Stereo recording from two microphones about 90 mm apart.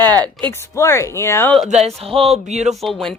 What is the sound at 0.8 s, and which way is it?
Speech, 30° left (ahead or behind).